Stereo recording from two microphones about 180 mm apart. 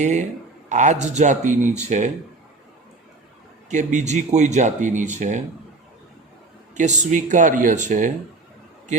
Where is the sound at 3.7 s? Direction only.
40° right (ahead or behind).